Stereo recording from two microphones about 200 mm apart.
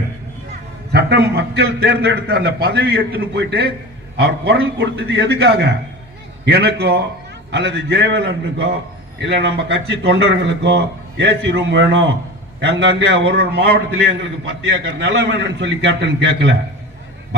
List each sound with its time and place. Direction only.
0.9 s a man's voice: 55° right (ahead or behind)